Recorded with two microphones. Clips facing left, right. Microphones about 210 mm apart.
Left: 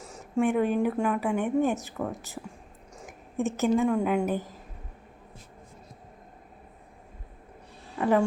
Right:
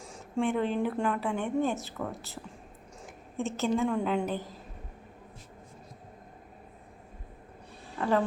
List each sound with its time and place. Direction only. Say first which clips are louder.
0.0 s a woman's voice: left 4 dB; 5° left (ahead or behind)
3.0 s a sound: left 5 dB; 15° left (ahead or behind)
3.8 s a woman's voice: left 4 dB; 10° left (ahead or behind)
7.9 s speech: left 4 dB; 10° left (ahead or behind)